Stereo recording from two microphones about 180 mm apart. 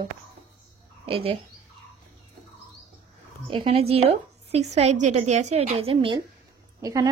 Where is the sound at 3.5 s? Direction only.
30° right (ahead or behind).